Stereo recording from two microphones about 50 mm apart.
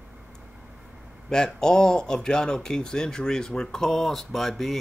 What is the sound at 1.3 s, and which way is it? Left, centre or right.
Speech, centre.